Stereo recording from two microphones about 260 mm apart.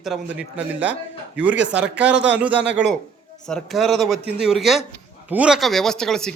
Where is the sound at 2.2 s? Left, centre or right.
Centre.